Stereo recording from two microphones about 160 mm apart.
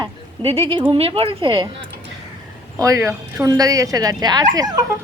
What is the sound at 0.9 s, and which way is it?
Speech, 35° right (ahead or behind).